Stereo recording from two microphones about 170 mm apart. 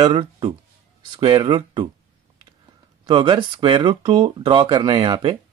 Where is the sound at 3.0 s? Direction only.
30° right (ahead or behind).